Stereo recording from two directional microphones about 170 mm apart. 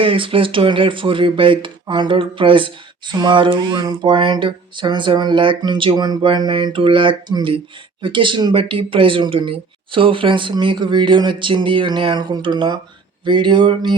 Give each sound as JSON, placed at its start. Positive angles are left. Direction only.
{"t": 0.0, "sound": "speech", "side_deg": -30}